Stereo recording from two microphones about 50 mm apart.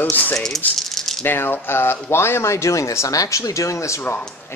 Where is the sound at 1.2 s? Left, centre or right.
Left.